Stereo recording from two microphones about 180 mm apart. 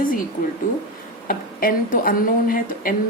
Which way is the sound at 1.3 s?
50° left (ahead or behind).